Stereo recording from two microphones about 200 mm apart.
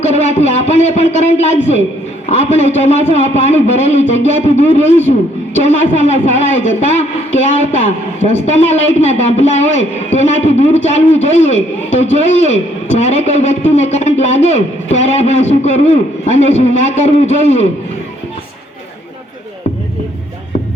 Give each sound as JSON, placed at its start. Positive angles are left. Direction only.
{"t": 0.0, "sound": "a woman's voice", "side_deg": 35}